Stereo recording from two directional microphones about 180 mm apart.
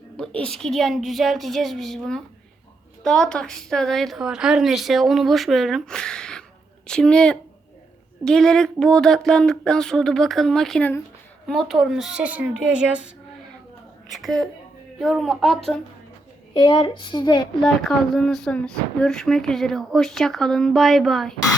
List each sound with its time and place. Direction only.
0.2 s speech: 5° left (ahead or behind)
14.1 s speech: centre (ahead or behind)
16.6 s a woman's voice: 25° left (ahead or behind)
17.6 s speech: centre (ahead or behind)